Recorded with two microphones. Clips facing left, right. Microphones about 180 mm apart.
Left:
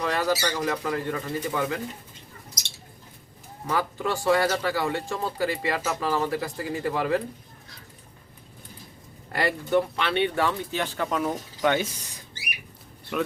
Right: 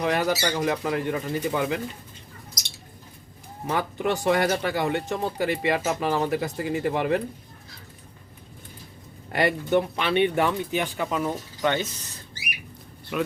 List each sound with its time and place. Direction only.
0.0 s speech: 20° right (ahead or behind)
3.7 s speech: 20° right (ahead or behind)
9.3 s speech: 20° right (ahead or behind)
11.0 s speech: centre (ahead or behind)
13.1 s speech: centre (ahead or behind)